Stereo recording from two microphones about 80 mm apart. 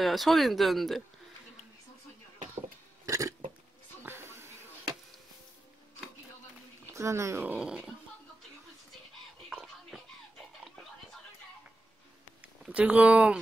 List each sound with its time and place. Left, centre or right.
0.0 s speech: centre
3.1 s a sound: right
4.0 s a sound: right
6.9 s speech: right
7.5 s speech: centre
9.8 s music: centre
12.6 s speech: centre